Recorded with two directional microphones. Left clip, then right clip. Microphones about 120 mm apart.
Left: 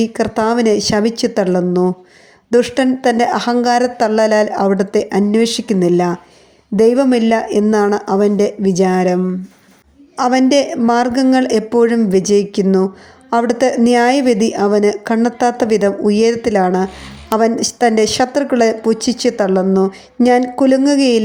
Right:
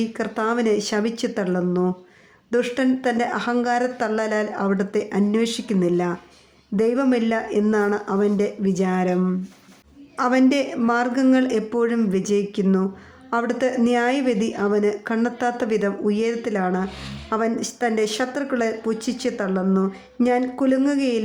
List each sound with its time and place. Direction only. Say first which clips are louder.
0.0 s a woman's voice: left 9 dB; 45° left (ahead or behind)